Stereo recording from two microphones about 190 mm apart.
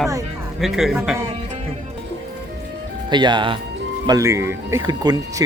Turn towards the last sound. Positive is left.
turn(degrees=-20)  # may be behind; listen again after turning